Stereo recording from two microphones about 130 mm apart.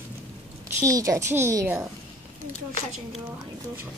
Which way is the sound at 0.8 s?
25° right (ahead or behind).